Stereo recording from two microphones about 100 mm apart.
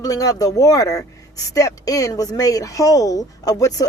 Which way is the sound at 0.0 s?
35° left (ahead or behind).